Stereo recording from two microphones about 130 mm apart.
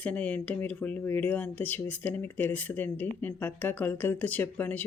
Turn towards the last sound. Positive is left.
turn(degrees=15)  # may be behind; listen again after turning